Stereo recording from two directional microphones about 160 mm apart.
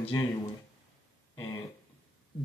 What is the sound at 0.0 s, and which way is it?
Speech, 35° left (ahead or behind).